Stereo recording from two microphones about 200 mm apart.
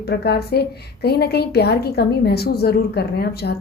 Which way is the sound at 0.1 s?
55° left (ahead or behind).